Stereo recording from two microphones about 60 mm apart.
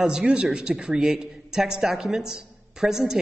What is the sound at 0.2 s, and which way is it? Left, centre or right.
A man's voice, centre.